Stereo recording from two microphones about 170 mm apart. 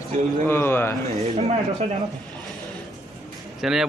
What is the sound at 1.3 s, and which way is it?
Speech, 40° right (ahead or behind).